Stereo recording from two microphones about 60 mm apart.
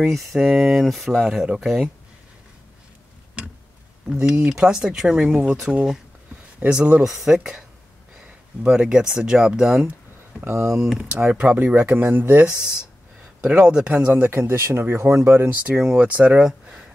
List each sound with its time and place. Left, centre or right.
0.0 s speech: centre
4.3 s speech: centre
10.4 s speech: right
11.1 s speech: right
11.7 s speech: right
13.4 s speech: centre
14.1 s speech: right
14.5 s speech: right
15.7 s speech: centre